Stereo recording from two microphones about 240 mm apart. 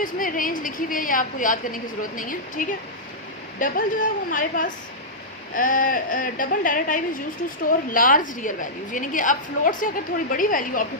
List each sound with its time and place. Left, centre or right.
0.0 s a woman's voice: left